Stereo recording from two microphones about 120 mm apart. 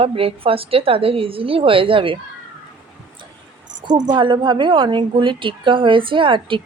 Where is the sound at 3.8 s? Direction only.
35° right (ahead or behind).